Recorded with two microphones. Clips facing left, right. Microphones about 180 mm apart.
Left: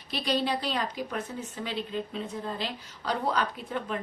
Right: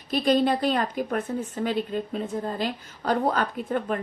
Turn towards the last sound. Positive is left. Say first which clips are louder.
# right 6 dB
turn(degrees=-50)  # may be behind; listen again after turning